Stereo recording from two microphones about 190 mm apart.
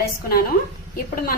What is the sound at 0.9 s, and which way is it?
Speech, 50° left (ahead or behind).